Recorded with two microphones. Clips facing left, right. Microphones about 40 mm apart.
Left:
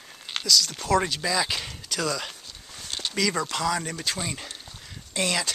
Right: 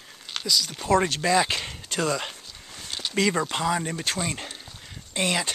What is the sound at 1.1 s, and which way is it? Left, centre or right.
Speech, right.